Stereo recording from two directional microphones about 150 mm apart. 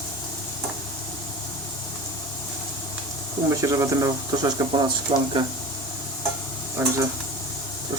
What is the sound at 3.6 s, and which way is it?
Speech, 25° right (ahead or behind).